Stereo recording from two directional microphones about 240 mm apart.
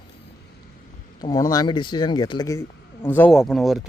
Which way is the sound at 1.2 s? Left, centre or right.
Centre.